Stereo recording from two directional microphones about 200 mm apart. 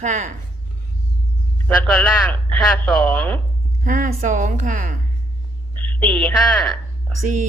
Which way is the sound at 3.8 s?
40° right (ahead or behind).